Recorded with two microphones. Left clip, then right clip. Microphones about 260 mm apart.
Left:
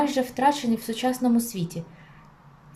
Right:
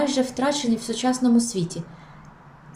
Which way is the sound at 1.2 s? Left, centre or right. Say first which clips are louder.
Right 3 dB; left.